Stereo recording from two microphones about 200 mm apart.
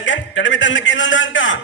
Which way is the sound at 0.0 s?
70° left (ahead or behind).